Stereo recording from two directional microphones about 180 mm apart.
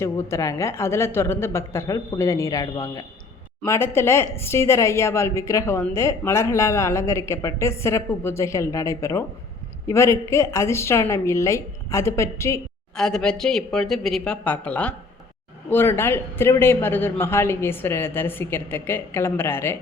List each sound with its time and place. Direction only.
0.0 s a woman's voice: 15° left (ahead or behind)
13.0 s a woman's voice: 5° left (ahead or behind)